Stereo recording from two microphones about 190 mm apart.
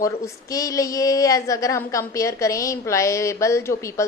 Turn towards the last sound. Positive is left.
turn(degrees=15)  # may be behind; listen again after turning